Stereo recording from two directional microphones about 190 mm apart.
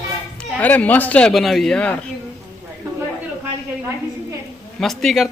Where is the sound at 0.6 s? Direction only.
10° left (ahead or behind).